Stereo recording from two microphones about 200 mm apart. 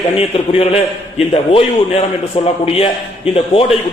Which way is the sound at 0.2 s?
30° left (ahead or behind).